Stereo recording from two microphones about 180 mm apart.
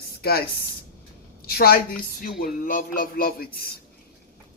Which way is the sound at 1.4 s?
55° left (ahead or behind).